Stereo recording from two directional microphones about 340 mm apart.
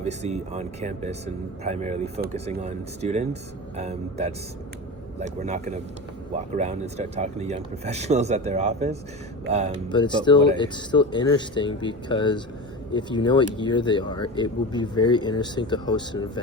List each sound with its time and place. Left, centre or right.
0.0 s speech: centre
9.9 s speech: centre